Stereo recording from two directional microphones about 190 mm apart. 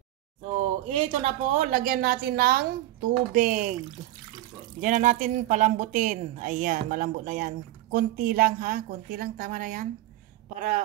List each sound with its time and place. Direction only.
0.8 s speech: 35° right (ahead or behind)
1.6 s speech: 50° right (ahead or behind)
4.7 s speech: 40° right (ahead or behind)